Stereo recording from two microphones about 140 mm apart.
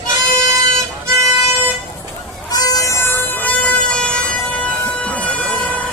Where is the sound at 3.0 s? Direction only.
15° left (ahead or behind).